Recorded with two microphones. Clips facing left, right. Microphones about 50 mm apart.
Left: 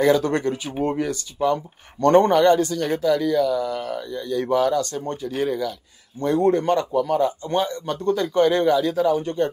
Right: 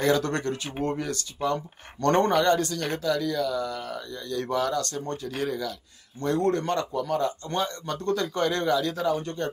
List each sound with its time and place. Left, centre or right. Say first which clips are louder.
0.0 s a man's voice: left 6 dB; centre
3.2 s a man's voice: left 6 dB; left